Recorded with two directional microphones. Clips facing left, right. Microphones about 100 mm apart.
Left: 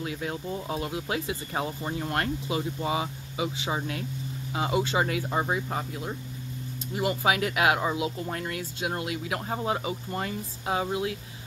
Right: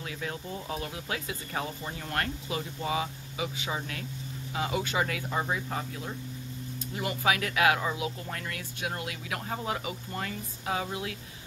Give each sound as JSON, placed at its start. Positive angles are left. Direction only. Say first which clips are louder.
{"t": 0.0, "sound": "speech", "louder": "left 4 dB", "side_deg": 25}